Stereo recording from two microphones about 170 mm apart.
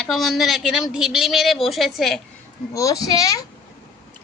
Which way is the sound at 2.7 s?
20° left (ahead or behind).